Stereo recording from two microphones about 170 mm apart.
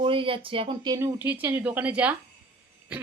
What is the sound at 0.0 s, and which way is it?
Speech, 30° right (ahead or behind).